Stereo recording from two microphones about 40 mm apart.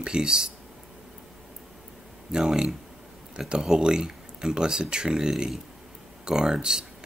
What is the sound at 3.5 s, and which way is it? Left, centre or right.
Speech, centre.